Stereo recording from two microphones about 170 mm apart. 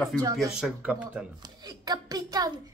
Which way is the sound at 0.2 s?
20° right (ahead or behind).